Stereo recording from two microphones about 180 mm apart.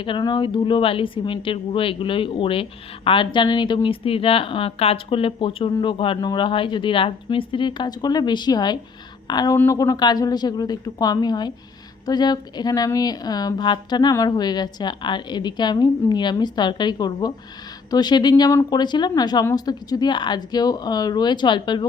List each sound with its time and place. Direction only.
0.0 s speech: 25° left (ahead or behind)